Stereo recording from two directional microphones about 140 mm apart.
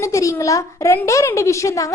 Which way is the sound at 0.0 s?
20° left (ahead or behind).